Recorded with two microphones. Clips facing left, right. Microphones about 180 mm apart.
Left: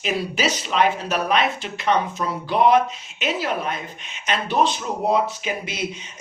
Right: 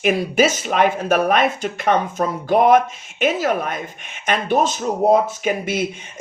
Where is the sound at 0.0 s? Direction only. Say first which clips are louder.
Right 7 dB; 50° right (ahead or behind).